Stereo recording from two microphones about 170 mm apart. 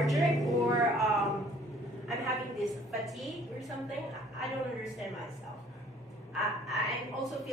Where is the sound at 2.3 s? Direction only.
Centre (ahead or behind).